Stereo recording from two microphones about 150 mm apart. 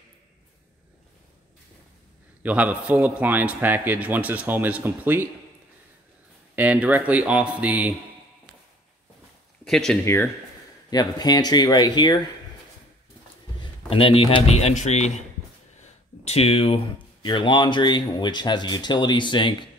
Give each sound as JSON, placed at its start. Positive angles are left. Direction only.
{"t": 2.4, "sound": "a man's voice", "side_deg": -10}
{"t": 6.5, "sound": "a man's voice", "side_deg": -10}
{"t": 9.7, "sound": "speech", "side_deg": 5}
{"t": 10.0, "sound": "speech", "side_deg": 15}
{"t": 13.6, "sound": "speech", "side_deg": 40}